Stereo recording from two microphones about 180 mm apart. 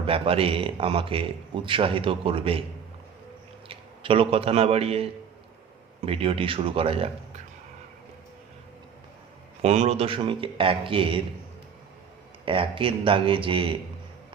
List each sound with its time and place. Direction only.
0.0 s speech: 30° right (ahead or behind)
3.7 s a man's voice: 30° right (ahead or behind)
6.1 s speech: 30° right (ahead or behind)
9.6 s speech: 35° right (ahead or behind)
12.5 s speech: 30° right (ahead or behind)